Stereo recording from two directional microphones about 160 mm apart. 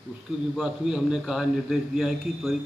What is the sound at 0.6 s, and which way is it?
A man's voice, 5° right (ahead or behind).